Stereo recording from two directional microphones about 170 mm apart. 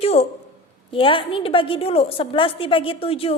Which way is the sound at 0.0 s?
35° left (ahead or behind).